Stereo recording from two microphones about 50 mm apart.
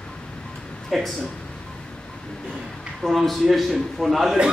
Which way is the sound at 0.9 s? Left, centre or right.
Centre.